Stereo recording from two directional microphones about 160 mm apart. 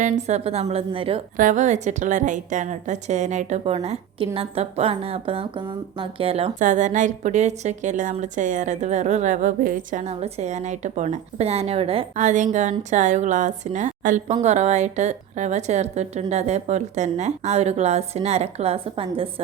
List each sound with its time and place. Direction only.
0.0 s speech: 45° right (ahead or behind)
1.4 s a woman's voice: 50° right (ahead or behind)
6.6 s a woman's voice: 50° right (ahead or behind)
12.1 s a woman's voice: 50° right (ahead or behind); by 19.3 s 35° right (ahead or behind)